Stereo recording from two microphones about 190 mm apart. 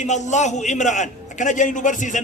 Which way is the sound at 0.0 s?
40° left (ahead or behind).